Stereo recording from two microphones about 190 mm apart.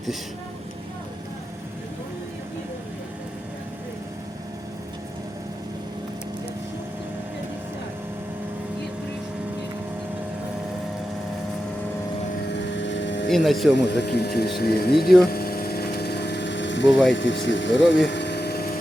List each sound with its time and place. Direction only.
12.5 s vehicle: 70° left (ahead or behind)
13.3 s speech: centre (ahead or behind)
13.7 s speech: 65° left (ahead or behind)
15.3 s vehicle: 55° left (ahead or behind); by 16.9 s 70° left (ahead or behind)
17.2 s speech: 70° left (ahead or behind)
18.1 s a sound: 65° left (ahead or behind)